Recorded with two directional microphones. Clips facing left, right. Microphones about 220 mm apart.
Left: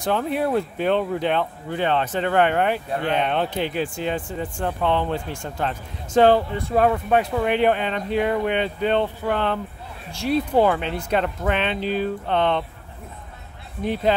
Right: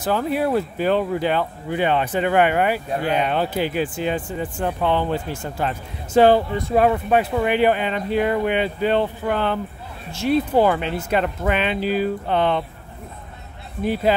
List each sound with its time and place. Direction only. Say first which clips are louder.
0.0 s speech: right 1 dB; 5° right (ahead or behind)
13.8 s speech: right 2 dB; 5° right (ahead or behind)